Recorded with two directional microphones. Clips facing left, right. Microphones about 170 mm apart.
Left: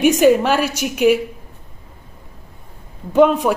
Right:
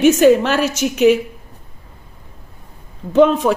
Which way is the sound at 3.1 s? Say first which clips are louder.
Right 1 dB; 10° left (ahead or behind).